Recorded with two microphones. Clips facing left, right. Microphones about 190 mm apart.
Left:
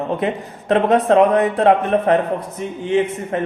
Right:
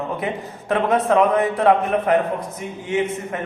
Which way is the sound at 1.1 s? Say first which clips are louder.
Left 3 dB; 20° left (ahead or behind).